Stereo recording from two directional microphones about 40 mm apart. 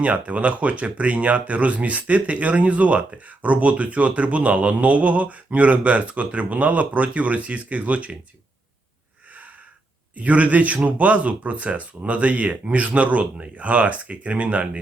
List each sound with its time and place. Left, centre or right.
0.0 s speech: right
10.2 s speech: right